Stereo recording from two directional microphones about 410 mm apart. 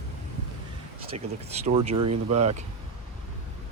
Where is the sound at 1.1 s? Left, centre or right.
Centre.